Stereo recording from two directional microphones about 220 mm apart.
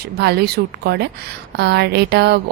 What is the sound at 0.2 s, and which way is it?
A woman's voice, 50° right (ahead or behind).